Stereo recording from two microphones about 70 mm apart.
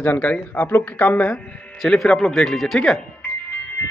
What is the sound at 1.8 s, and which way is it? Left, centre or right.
Speech, centre.